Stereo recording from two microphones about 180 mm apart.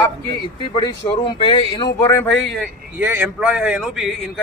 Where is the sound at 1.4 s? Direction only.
30° left (ahead or behind); by 2.6 s 5° left (ahead or behind).